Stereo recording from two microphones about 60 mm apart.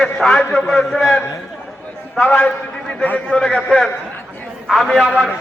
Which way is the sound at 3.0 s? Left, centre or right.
Left.